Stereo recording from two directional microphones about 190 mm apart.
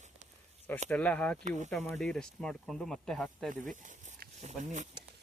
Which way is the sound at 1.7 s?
5° left (ahead or behind).